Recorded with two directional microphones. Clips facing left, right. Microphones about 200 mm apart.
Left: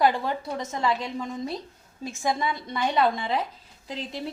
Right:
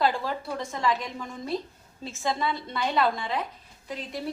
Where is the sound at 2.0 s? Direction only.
15° left (ahead or behind).